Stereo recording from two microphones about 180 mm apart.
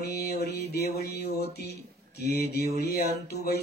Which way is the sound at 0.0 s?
65° left (ahead or behind).